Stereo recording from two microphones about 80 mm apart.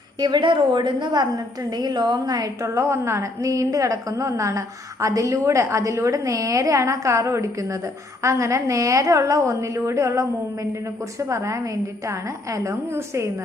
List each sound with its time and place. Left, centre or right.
0.2 s a woman's voice: right
1.7 s a woman's voice: right
2.6 s a woman's voice: right